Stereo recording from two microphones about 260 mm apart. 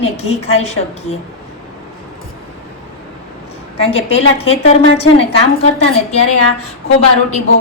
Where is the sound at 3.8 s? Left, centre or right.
Left.